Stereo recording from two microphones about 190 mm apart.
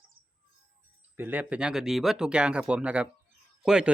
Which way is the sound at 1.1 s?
10° right (ahead or behind).